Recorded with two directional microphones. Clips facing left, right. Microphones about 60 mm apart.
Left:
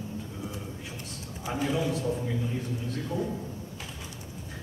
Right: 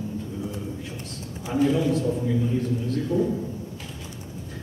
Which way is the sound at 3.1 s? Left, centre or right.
Centre.